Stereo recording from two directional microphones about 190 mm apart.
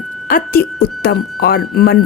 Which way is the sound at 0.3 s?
50° left (ahead or behind).